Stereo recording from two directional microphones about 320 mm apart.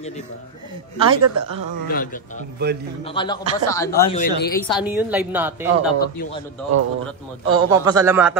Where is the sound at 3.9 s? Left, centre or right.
Left.